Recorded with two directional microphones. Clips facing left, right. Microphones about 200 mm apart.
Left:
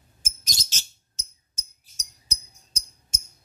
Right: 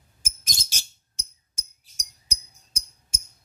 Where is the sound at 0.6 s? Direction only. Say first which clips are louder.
Even; 10° right (ahead or behind).